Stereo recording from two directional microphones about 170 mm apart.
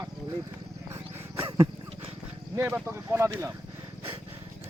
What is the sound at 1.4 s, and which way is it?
Wild animals, 30° right (ahead or behind).